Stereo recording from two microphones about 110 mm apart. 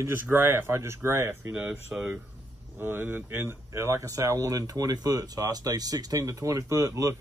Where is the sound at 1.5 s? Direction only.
15° right (ahead or behind); by 7.2 s 30° right (ahead or behind).